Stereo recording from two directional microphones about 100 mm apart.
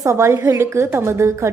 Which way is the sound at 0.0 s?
30° right (ahead or behind).